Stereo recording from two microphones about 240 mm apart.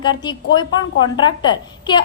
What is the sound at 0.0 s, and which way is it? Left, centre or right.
A woman's voice, centre.